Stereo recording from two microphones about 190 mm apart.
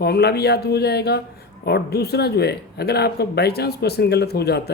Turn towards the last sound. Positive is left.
turn(degrees=60)  # may be behind; listen again after turning